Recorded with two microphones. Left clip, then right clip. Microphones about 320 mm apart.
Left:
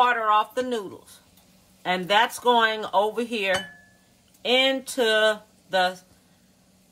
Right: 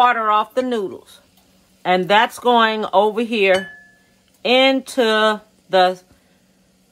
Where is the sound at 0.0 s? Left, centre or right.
Right.